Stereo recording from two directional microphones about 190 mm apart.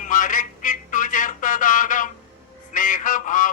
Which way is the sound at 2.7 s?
45° left (ahead or behind).